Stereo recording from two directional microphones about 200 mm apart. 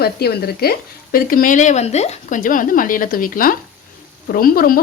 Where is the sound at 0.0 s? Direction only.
50° left (ahead or behind).